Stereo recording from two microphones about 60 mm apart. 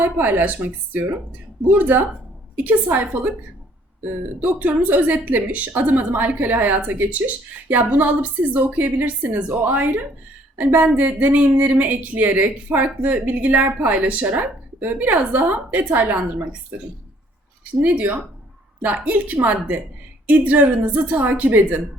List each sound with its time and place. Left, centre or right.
0.0 s speech: right
17.7 s speech: right